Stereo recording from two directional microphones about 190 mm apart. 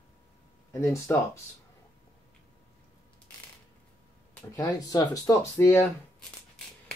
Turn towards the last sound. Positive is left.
turn(degrees=10)  # may be behind; listen again after turning